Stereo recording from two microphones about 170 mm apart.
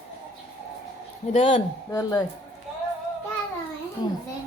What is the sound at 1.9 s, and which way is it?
Speech, 20° left (ahead or behind).